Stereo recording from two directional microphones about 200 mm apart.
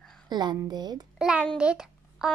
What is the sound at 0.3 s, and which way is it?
Speech, 20° right (ahead or behind).